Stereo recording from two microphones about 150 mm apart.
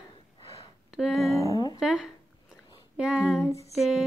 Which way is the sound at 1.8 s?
5° right (ahead or behind).